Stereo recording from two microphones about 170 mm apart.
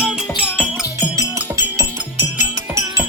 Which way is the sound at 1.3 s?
15° right (ahead or behind).